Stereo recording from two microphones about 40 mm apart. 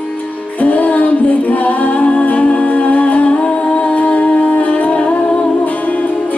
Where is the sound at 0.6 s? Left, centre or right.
Left.